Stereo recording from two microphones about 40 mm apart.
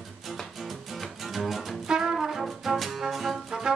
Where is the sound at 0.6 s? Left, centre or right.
Centre.